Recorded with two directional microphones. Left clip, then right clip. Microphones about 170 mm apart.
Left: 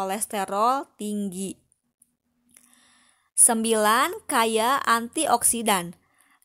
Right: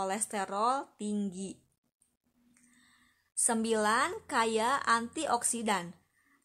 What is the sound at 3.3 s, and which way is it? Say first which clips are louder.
A woman's voice: left 8 dB; 40° left (ahead or behind).